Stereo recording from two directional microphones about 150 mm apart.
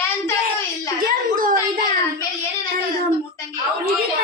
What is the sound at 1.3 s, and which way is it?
Speech, 65° right (ahead or behind).